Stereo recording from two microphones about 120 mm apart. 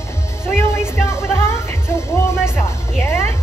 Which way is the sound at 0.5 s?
20° left (ahead or behind).